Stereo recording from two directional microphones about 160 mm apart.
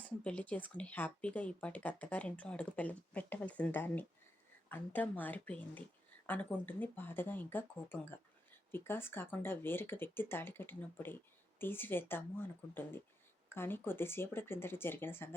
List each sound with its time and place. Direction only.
0.0 s speech: 10° left (ahead or behind)